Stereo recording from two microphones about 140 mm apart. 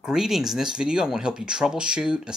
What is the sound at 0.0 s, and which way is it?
Speech, 5° right (ahead or behind).